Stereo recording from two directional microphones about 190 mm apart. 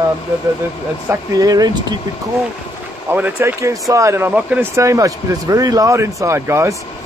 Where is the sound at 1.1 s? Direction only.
20° right (ahead or behind).